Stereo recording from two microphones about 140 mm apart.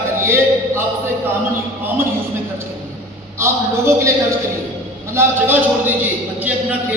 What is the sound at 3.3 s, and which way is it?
Speech, 20° right (ahead or behind).